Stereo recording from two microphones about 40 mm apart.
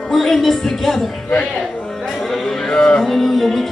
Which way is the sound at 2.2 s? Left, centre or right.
Centre.